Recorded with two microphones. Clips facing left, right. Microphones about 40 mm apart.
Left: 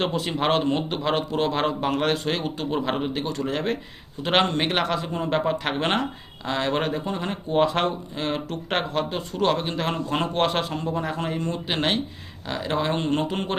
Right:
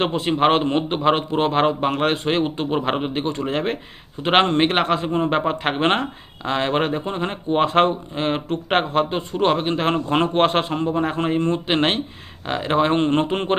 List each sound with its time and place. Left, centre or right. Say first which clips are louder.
0.0 s a man's voice: right 6 dB; right